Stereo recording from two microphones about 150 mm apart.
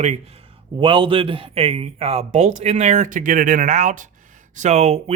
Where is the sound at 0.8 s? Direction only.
35° right (ahead or behind).